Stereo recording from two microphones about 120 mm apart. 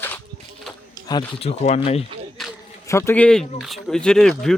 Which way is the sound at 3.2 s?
5° left (ahead or behind).